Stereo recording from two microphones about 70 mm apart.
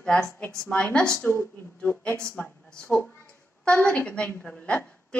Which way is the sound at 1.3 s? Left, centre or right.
Left.